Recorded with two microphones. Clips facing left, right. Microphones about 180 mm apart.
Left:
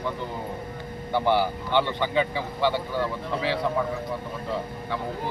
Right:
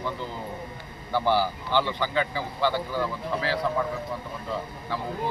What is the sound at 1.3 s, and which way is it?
Speech, 20° left (ahead or behind).